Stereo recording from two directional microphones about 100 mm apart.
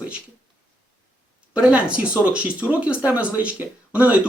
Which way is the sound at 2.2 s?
15° right (ahead or behind).